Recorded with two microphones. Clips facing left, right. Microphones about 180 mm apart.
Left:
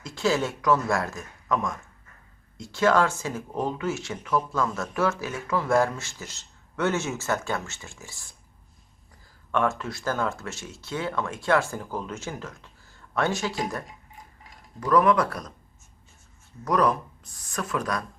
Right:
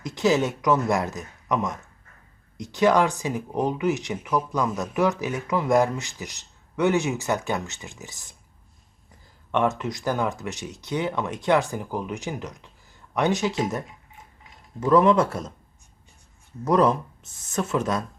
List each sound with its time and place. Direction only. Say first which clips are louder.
0.0 s speech: right 4 dB; 20° right (ahead or behind)
9.5 s speech: right 2 dB; 20° right (ahead or behind)
14.8 s speech: right 3 dB; 25° right (ahead or behind)
16.6 s speech: right 3 dB; 25° right (ahead or behind)